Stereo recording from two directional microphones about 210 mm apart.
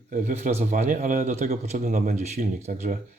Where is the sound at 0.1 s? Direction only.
35° right (ahead or behind).